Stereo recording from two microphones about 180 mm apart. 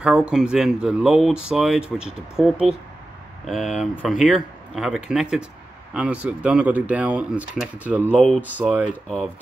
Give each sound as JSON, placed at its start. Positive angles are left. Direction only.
{"t": 0.0, "sound": "speech", "side_deg": -5}
{"t": 8.2, "sound": "speech", "side_deg": 5}
{"t": 8.5, "sound": "speech", "side_deg": -10}